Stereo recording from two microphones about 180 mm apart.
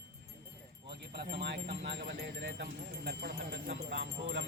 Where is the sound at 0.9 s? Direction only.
65° right (ahead or behind).